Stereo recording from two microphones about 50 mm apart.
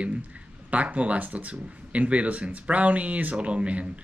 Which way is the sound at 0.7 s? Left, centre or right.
Right.